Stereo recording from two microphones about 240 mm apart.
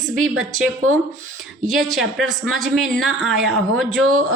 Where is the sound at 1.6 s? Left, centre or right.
Centre.